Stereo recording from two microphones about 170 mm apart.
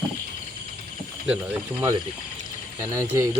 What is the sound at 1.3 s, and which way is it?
Speech, 10° right (ahead or behind).